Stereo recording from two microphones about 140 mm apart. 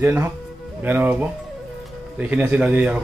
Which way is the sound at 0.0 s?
20° right (ahead or behind).